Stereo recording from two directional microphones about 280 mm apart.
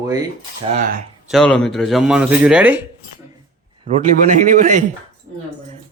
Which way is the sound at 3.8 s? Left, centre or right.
Right.